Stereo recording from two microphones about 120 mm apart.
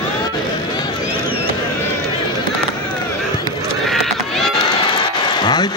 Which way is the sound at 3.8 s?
Centre (ahead or behind).